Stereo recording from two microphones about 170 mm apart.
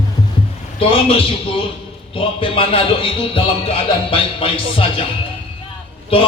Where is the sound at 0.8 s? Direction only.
35° left (ahead or behind).